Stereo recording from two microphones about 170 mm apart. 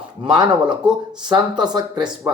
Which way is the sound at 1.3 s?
25° right (ahead or behind).